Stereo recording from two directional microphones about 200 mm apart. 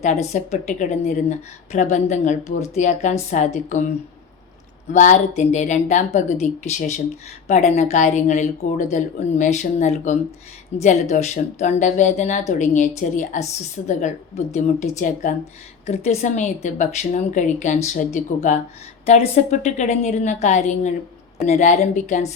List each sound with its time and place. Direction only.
0.0 s speech: 35° left (ahead or behind)
4.9 s speech: 35° left (ahead or behind)